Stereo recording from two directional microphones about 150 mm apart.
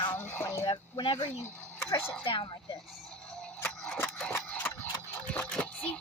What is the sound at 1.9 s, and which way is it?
Speech, 15° left (ahead or behind).